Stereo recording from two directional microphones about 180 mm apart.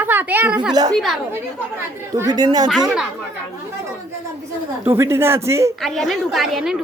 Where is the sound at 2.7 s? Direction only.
5° right (ahead or behind).